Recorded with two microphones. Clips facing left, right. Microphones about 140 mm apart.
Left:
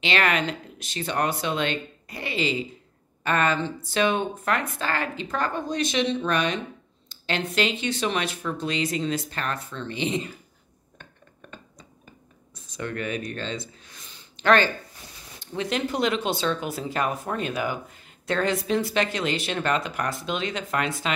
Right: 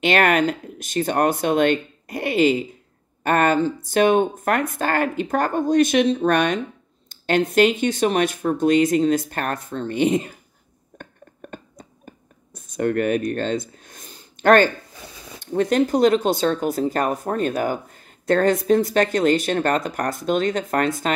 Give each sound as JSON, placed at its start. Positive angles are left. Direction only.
{"t": 0.0, "sound": "speech", "side_deg": -50}
{"t": 11.0, "sound": "a sound", "side_deg": -50}
{"t": 15.4, "sound": "speech", "side_deg": -50}